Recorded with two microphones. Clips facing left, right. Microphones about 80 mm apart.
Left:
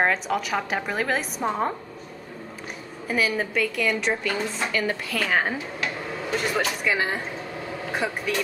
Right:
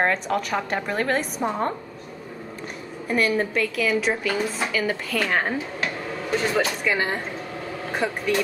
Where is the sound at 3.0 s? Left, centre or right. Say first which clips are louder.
Right 3 dB; centre.